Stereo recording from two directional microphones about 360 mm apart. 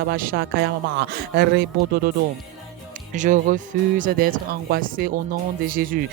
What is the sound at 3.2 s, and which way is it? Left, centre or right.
Speech, right.